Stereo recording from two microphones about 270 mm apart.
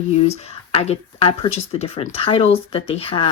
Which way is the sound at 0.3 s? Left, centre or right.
Left.